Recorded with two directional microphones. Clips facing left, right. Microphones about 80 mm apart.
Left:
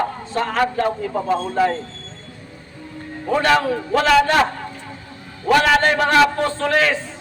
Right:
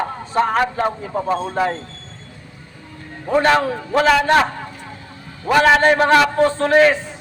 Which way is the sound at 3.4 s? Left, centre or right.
Right.